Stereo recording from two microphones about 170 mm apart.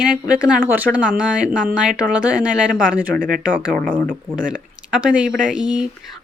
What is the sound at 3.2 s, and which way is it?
Speech, 55° right (ahead or behind).